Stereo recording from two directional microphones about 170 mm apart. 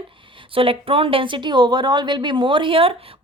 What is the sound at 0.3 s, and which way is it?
A woman's voice, 30° right (ahead or behind).